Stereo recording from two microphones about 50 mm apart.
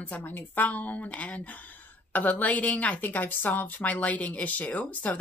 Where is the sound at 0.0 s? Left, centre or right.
Left.